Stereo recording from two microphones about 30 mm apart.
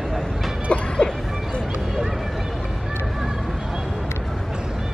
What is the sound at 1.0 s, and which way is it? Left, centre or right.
Music, left.